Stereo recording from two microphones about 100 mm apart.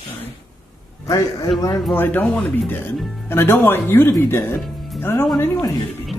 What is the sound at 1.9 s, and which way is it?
Speech, 20° left (ahead or behind).